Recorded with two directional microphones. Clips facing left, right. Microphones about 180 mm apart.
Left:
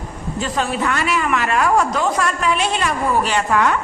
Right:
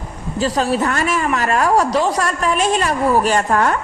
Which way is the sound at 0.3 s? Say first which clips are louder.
Right 4 dB; 35° right (ahead or behind).